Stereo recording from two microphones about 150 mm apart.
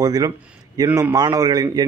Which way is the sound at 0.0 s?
25° right (ahead or behind).